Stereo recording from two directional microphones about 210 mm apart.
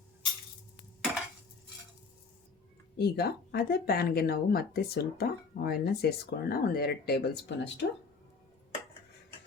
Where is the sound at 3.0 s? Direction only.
50° left (ahead or behind).